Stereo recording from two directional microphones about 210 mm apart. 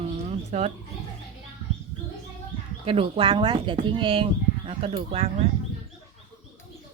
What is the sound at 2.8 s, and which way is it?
Speech, 25° right (ahead or behind).